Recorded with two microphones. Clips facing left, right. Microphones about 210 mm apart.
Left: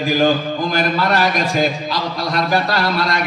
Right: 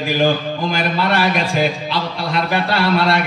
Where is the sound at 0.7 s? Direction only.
40° left (ahead or behind).